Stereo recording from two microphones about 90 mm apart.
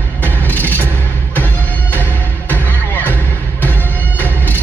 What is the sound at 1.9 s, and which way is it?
Music, 20° left (ahead or behind).